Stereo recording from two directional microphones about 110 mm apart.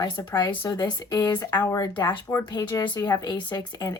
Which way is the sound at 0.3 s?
35° left (ahead or behind).